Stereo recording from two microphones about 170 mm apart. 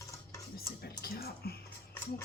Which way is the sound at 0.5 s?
65° left (ahead or behind).